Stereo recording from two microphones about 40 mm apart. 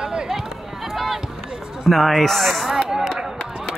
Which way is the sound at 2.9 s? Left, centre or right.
Centre.